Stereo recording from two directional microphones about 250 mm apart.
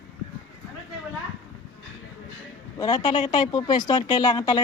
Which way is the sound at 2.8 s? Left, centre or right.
Centre.